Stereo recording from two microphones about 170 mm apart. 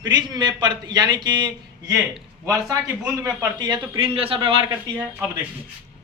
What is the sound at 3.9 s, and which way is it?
Speech, 35° right (ahead or behind).